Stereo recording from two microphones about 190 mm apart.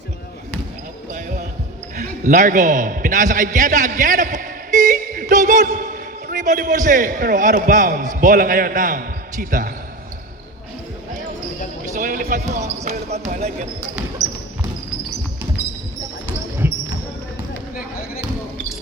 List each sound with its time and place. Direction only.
2.0 s a man's voice: 40° right (ahead or behind)
11.9 s music: 45° right (ahead or behind)
12.8 s speech: 35° right (ahead or behind)
16.6 s basketball bounce: 10° right (ahead or behind)